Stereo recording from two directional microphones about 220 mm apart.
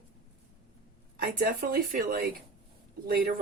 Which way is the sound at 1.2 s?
40° right (ahead or behind).